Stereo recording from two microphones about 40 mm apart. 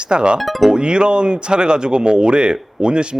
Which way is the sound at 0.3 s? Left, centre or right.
Centre.